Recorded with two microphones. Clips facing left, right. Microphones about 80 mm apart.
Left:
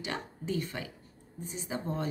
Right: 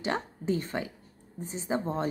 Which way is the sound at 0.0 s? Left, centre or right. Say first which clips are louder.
Right 6 dB; right.